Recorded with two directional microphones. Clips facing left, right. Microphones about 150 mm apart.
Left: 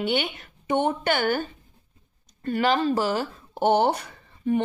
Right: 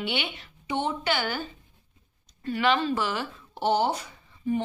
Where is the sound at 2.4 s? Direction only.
45° left (ahead or behind).